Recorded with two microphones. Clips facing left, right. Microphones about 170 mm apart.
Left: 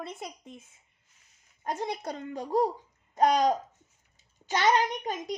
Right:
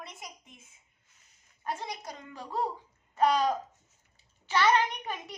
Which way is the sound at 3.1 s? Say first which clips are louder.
Left 3 dB; 20° left (ahead or behind).